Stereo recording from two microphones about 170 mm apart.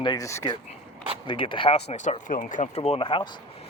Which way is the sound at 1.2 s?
30° left (ahead or behind).